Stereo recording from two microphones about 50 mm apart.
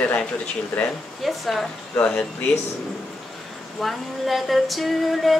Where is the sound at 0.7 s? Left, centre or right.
Left.